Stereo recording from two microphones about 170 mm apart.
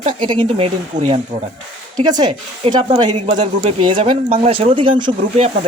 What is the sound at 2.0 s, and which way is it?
Speech, 25° right (ahead or behind).